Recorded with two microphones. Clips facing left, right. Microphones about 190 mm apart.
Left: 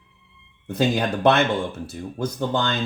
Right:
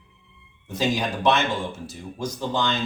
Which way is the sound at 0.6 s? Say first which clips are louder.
Left 3 dB; 60° left (ahead or behind).